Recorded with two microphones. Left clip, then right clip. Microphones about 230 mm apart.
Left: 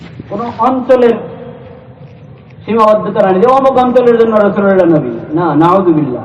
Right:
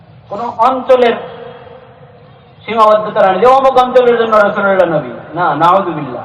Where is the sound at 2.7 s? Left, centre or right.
Right.